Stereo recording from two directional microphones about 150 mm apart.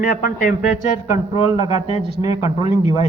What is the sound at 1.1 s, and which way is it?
A man's voice, 45° left (ahead or behind).